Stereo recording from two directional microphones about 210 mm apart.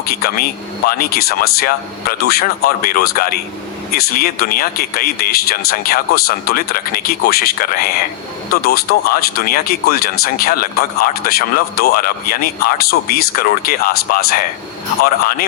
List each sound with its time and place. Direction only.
0.0 s speech: 45° left (ahead or behind)